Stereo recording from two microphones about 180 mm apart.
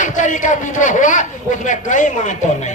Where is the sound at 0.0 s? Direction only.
45° left (ahead or behind).